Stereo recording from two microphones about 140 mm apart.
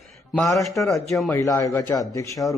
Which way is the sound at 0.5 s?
Centre (ahead or behind).